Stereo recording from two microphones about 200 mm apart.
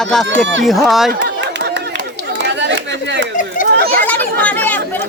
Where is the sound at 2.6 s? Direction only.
60° right (ahead or behind).